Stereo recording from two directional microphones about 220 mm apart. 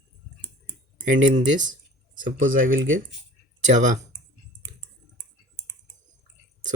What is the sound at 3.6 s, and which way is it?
Speech, 35° right (ahead or behind).